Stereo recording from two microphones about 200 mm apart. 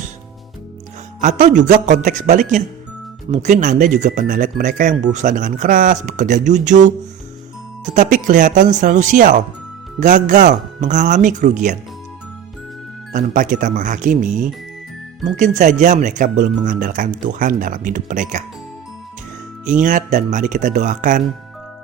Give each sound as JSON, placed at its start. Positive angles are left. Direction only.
{"t": 1.2, "sound": "speech", "side_deg": -40}
{"t": 7.9, "sound": "speech", "side_deg": -40}
{"t": 13.1, "sound": "speech", "side_deg": -40}
{"t": 19.8, "sound": "speech", "side_deg": -40}